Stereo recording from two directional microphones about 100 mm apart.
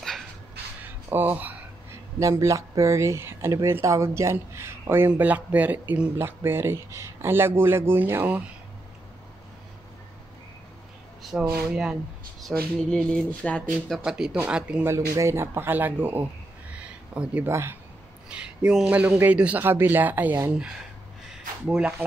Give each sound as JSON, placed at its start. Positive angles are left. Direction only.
{"t": 0.8, "sound": "a sound", "side_deg": -20}
{"t": 2.1, "sound": "speech", "side_deg": -30}
{"t": 11.2, "sound": "a man's voice", "side_deg": -5}
{"t": 12.4, "sound": "music", "side_deg": 5}
{"t": 13.3, "sound": "speech", "side_deg": 15}
{"t": 13.8, "sound": "a man's voice", "side_deg": -5}
{"t": 14.9, "sound": "speech", "side_deg": -30}
{"t": 16.7, "sound": "a sound", "side_deg": -10}
{"t": 17.5, "sound": "speech", "side_deg": -25}
{"t": 18.3, "sound": "a man's voice", "side_deg": -10}
{"t": 21.3, "sound": "a sound", "side_deg": -10}